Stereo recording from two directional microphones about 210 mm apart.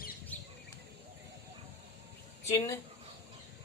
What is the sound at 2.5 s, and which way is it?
Speech, 10° left (ahead or behind).